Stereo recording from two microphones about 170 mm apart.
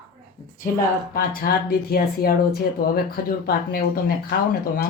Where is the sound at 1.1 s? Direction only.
55° left (ahead or behind).